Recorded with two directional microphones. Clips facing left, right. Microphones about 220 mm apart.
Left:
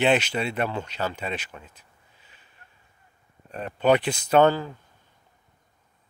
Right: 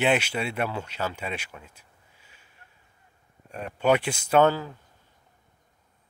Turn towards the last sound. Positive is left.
turn(degrees=-5)  # may be behind; listen again after turning